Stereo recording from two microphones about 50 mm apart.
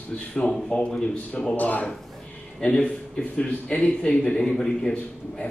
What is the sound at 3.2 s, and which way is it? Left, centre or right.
A man's voice, left.